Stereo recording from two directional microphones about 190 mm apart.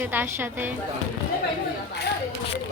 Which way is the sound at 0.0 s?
10° right (ahead or behind).